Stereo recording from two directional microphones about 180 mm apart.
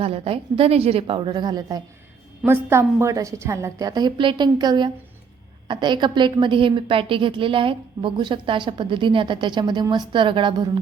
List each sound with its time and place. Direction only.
0.0 s a woman's voice: 30° right (ahead or behind)